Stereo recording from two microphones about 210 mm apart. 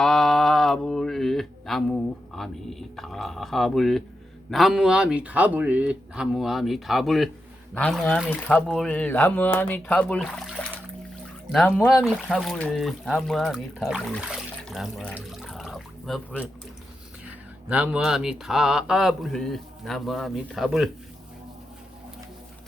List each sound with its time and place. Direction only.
0.0 s speech: centre (ahead or behind)